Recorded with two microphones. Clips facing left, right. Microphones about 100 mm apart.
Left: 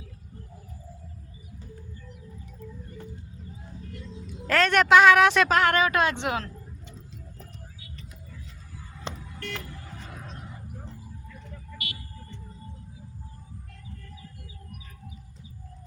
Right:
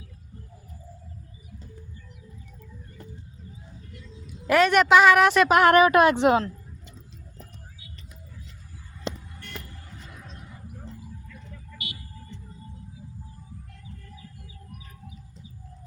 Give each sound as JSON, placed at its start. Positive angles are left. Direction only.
{"t": 4.4, "sound": "a woman's voice", "side_deg": -10}
{"t": 5.5, "sound": "a woman's voice", "side_deg": -20}
{"t": 9.4, "sound": "vehicle", "side_deg": 90}